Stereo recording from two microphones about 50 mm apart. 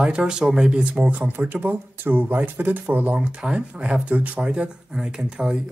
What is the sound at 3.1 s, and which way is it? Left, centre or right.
Speech, right.